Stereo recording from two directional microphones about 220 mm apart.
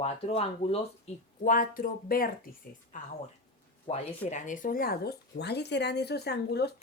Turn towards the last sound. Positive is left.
turn(degrees=45)  # may be behind; listen again after turning